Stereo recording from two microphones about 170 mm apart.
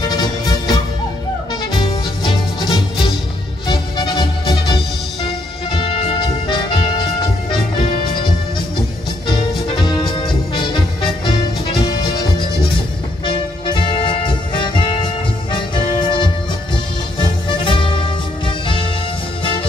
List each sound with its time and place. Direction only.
0.1 s music: 25° left (ahead or behind)
2.2 s music: 30° left (ahead or behind)
9.3 s music: 25° left (ahead or behind)